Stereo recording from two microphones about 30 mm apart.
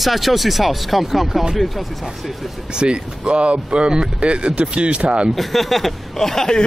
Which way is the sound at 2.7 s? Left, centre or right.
Right.